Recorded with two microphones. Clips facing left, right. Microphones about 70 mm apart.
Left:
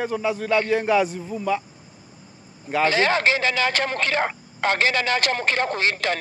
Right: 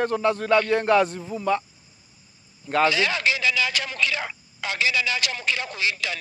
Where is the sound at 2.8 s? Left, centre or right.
Left.